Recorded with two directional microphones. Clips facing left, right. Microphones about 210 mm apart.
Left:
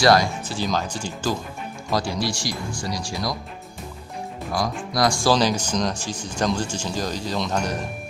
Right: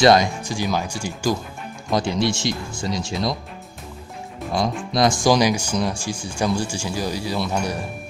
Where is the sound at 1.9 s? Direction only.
20° right (ahead or behind).